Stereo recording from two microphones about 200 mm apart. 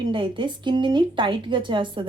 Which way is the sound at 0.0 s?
25° right (ahead or behind).